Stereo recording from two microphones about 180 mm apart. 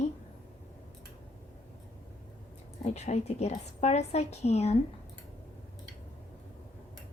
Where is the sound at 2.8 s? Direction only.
40° left (ahead or behind).